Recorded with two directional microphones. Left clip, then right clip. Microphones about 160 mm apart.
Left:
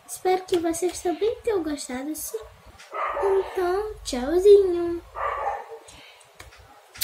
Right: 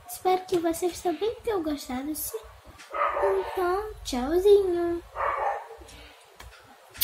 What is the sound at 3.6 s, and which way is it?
A woman's voice, 10° left (ahead or behind).